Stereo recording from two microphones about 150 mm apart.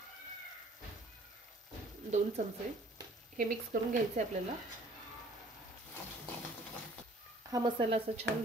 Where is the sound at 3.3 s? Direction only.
60° right (ahead or behind).